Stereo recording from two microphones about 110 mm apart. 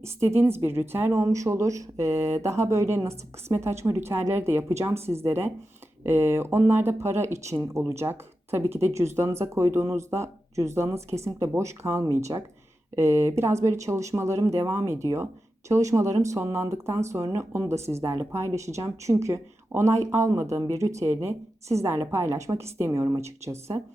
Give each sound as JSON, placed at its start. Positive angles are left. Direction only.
{"t": 0.0, "sound": "speech", "side_deg": -25}